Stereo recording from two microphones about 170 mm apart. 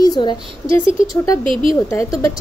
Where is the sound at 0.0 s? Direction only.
25° left (ahead or behind).